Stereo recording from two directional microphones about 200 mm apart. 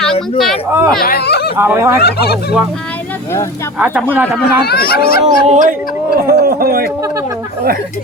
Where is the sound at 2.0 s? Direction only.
50° left (ahead or behind).